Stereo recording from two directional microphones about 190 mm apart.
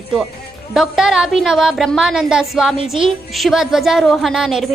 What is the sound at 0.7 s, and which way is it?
A woman's voice, centre (ahead or behind).